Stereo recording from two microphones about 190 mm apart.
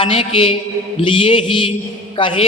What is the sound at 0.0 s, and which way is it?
A woman's voice, 30° left (ahead or behind).